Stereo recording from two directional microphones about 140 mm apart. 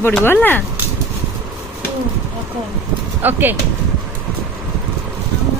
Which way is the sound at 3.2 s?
15° right (ahead or behind).